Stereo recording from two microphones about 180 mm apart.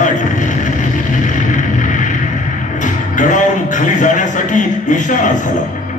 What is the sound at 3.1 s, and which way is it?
Music, 45° left (ahead or behind).